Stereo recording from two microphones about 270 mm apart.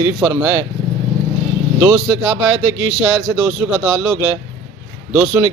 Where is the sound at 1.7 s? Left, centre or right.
Centre.